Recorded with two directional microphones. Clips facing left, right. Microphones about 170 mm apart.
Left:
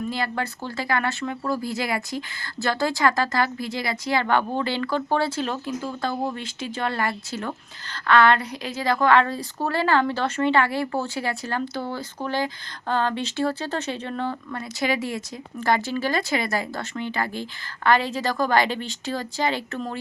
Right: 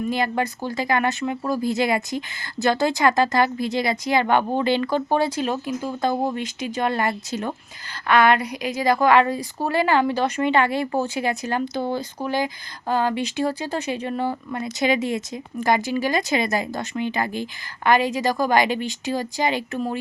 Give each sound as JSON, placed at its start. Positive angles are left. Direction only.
{"t": 0.1, "sound": "speech", "side_deg": -15}